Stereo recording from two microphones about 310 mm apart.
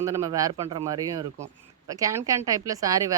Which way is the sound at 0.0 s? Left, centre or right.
Centre.